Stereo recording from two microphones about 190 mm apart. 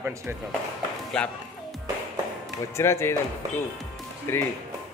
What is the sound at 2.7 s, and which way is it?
Speech, 15° left (ahead or behind).